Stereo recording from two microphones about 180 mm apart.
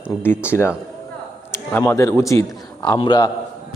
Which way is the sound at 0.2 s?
15° left (ahead or behind).